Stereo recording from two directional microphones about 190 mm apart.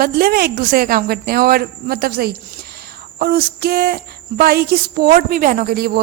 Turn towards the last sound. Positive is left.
turn(degrees=-55)  # may be behind; listen again after turning